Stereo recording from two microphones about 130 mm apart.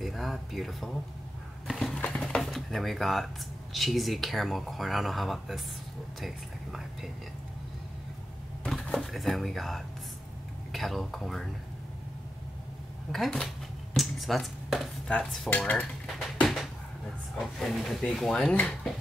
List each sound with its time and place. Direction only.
0.0 s speech: centre (ahead or behind)
1.7 s a sound: centre (ahead or behind)
3.7 s speech: centre (ahead or behind)
6.2 s whispering: centre (ahead or behind)
8.6 s speech: 5° left (ahead or behind)
13.9 s dishes: centre (ahead or behind)
16.3 s a sound: centre (ahead or behind)
17.4 s speech: 5° left (ahead or behind)